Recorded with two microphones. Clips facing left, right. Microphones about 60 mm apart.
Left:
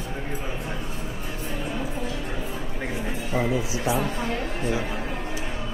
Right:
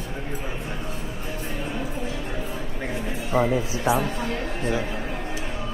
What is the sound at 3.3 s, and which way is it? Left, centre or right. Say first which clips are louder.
Music: right 4 dB; right.